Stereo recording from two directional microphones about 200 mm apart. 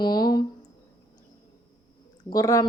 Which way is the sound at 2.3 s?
15° left (ahead or behind).